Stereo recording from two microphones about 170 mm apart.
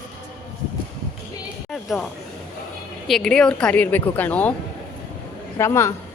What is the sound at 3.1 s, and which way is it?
A woman's voice, 5° left (ahead or behind).